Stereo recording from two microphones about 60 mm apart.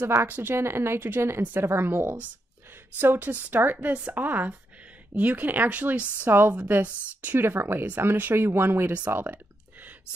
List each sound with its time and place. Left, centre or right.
0.2 s speech: right
0.6 s a woman's voice: right
7.3 s speech: right